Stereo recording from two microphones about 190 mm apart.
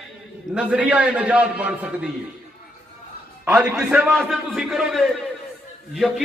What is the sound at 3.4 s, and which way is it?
A man's voice, 5° right (ahead or behind).